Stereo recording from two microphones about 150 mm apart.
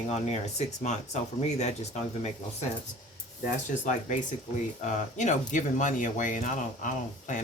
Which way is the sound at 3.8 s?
55° left (ahead or behind).